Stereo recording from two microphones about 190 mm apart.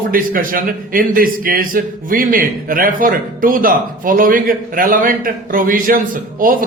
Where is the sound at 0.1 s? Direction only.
45° right (ahead or behind).